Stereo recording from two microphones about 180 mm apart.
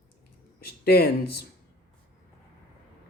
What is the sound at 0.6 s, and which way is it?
Speech, 60° left (ahead or behind).